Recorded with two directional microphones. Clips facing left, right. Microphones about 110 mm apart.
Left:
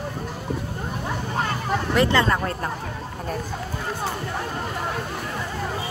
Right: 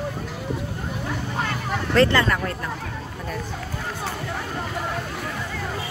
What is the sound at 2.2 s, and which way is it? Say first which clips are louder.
Speech: left 1 dB; 30° left (ahead or behind).